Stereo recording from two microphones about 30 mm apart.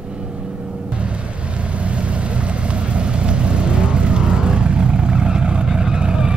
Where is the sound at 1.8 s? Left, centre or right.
Right.